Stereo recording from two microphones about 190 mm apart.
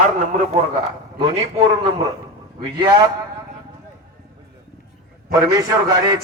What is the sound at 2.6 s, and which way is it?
Speech, 25° right (ahead or behind).